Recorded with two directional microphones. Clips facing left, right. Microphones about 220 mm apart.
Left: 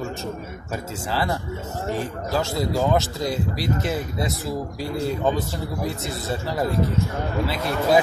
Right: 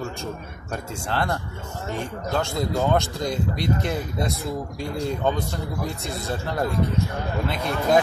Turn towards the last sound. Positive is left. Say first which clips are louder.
# left 1 dB
turn(degrees=5)  # may be behind; listen again after turning